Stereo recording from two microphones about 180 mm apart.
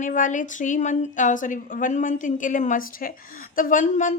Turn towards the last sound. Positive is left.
turn(degrees=45)  # may be behind; listen again after turning